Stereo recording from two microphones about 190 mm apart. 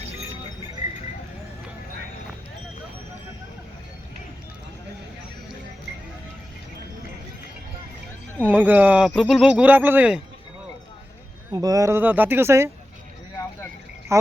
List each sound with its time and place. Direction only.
8.4 s speech: 10° right (ahead or behind)
11.5 s speech: 20° right (ahead or behind)
14.1 s speech: 15° right (ahead or behind)